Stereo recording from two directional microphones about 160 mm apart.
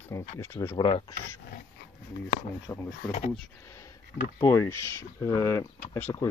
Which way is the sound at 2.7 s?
15° left (ahead or behind).